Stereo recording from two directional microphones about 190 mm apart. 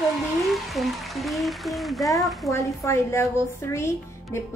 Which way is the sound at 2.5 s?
15° left (ahead or behind).